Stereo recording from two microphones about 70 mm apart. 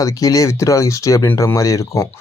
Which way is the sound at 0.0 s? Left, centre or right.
Left.